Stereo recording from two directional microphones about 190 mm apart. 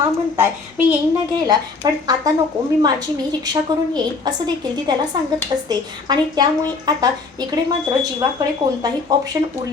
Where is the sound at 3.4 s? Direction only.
20° right (ahead or behind).